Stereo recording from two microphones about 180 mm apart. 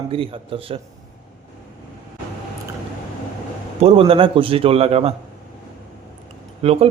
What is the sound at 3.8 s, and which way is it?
A man's voice, 30° right (ahead or behind).